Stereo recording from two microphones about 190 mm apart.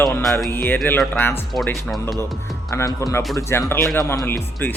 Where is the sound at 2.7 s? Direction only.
20° left (ahead or behind).